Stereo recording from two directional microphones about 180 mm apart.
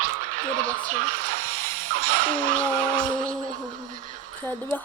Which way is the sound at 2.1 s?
50° right (ahead or behind).